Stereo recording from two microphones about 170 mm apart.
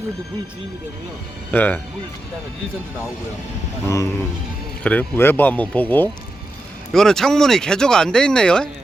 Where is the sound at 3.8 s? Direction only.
20° left (ahead or behind).